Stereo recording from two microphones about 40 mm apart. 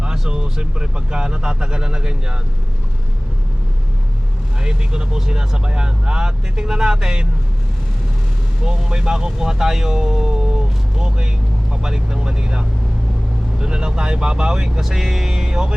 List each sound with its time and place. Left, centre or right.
0.0 s speech: right
4.6 s speech: centre
8.6 s speech: centre
14.8 s speech: centre